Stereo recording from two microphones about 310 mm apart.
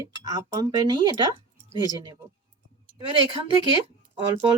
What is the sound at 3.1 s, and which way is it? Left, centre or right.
Speech, centre.